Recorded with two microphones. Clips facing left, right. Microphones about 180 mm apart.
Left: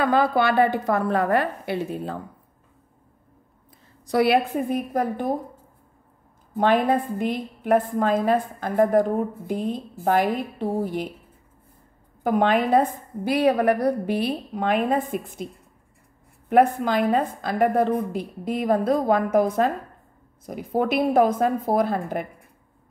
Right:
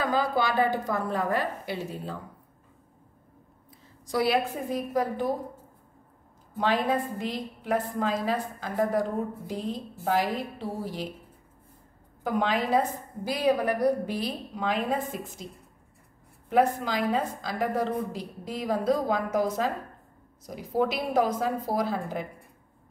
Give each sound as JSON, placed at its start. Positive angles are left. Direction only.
{"t": 0.0, "sound": "a woman's voice", "side_deg": 65}
{"t": 4.0, "sound": "a woman's voice", "side_deg": 65}
{"t": 6.5, "sound": "a woman's voice", "side_deg": 55}
{"t": 12.2, "sound": "a woman's voice", "side_deg": 55}
{"t": 16.4, "sound": "a woman's voice", "side_deg": 55}